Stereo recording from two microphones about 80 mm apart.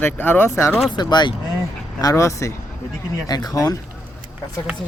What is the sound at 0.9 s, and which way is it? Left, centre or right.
Speech, left.